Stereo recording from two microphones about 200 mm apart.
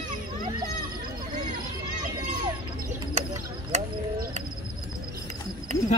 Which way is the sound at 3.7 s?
35° right (ahead or behind).